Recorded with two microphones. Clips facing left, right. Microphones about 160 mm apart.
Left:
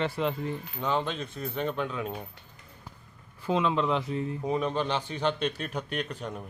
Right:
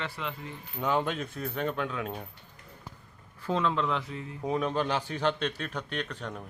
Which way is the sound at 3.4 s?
15° left (ahead or behind).